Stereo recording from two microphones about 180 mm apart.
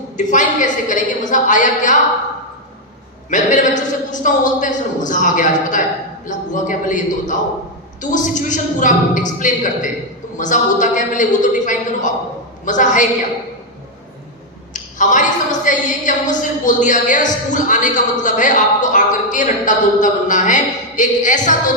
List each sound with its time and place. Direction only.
0.3 s a woman's voice: 45° left (ahead or behind)
3.2 s a woman's voice: 45° left (ahead or behind)
14.7 s a woman's voice: 45° left (ahead or behind)